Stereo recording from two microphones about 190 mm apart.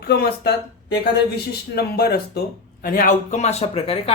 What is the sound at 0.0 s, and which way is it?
Speech, 55° left (ahead or behind).